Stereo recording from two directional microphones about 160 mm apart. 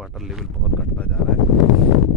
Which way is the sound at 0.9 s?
10° left (ahead or behind).